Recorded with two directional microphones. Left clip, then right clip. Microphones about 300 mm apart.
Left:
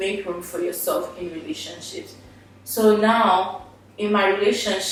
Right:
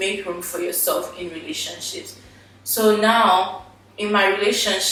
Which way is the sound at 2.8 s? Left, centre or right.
Centre.